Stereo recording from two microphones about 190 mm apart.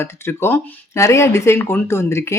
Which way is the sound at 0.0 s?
15° left (ahead or behind).